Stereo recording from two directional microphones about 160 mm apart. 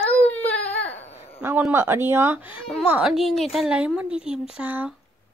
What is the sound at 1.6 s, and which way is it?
Speech, 15° right (ahead or behind).